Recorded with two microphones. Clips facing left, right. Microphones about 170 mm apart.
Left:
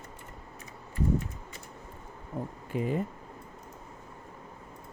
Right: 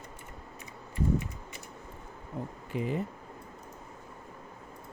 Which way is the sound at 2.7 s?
45° left (ahead or behind).